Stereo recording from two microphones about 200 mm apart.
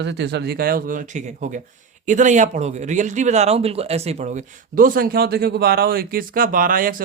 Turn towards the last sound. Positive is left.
turn(degrees=-45)  # may be behind; listen again after turning